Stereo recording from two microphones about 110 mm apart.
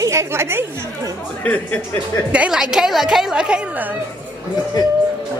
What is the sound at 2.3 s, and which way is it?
A woman's voice, 10° right (ahead or behind).